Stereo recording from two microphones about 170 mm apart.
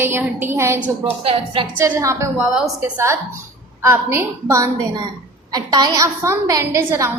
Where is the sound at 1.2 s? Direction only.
35° right (ahead or behind).